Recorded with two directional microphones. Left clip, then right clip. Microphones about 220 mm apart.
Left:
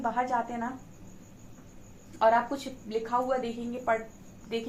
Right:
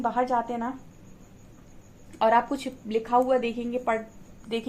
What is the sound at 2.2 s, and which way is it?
A woman's voice, 50° right (ahead or behind).